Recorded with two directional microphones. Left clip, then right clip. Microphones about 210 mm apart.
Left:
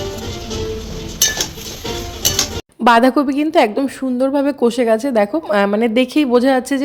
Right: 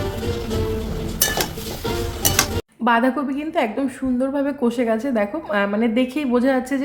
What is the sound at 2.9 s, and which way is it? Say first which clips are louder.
A woman's voice: left 7 dB; 45° left (ahead or behind).